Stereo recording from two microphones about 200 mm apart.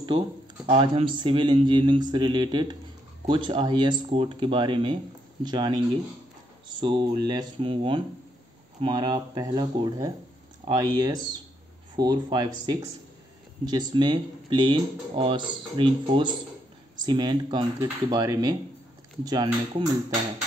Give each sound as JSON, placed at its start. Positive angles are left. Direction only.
{"t": 0.7, "sound": "speech", "side_deg": -25}